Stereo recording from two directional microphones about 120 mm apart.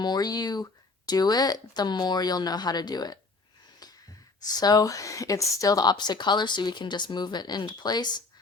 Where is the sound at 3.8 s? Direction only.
35° left (ahead or behind).